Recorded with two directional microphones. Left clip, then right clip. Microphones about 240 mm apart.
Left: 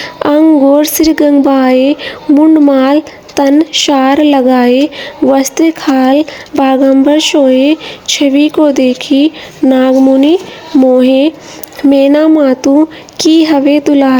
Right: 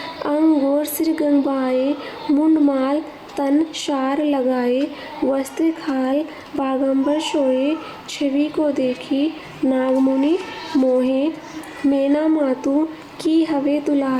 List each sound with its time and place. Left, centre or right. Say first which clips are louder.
0.2 s speech: left 11 dB; left